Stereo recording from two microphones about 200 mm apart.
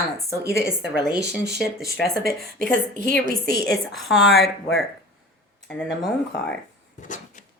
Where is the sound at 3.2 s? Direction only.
55° left (ahead or behind).